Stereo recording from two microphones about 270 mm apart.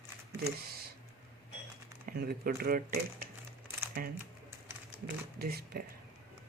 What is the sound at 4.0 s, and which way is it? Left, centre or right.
Speech, right.